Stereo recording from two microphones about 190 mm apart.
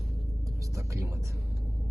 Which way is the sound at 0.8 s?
15° right (ahead or behind).